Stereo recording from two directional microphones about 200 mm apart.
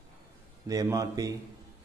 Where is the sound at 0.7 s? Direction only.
15° right (ahead or behind).